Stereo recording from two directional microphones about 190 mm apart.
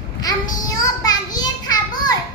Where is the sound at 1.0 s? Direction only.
20° left (ahead or behind).